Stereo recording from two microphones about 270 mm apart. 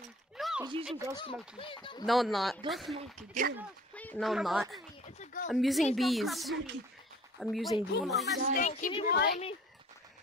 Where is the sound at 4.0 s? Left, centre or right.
Centre.